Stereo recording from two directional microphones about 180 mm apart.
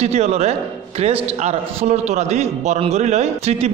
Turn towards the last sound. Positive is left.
turn(degrees=-35)  # may be behind; listen again after turning